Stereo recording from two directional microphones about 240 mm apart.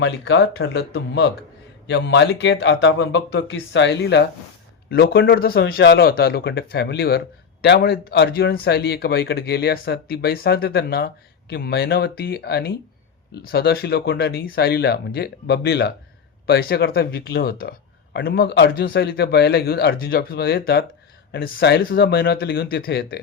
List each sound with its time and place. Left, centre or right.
0.0 s speech: left